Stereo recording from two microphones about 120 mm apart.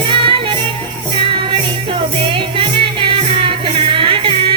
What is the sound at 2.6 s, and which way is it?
Music, 45° right (ahead or behind).